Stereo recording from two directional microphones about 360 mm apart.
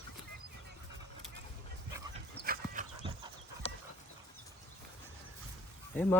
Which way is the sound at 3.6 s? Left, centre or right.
Centre.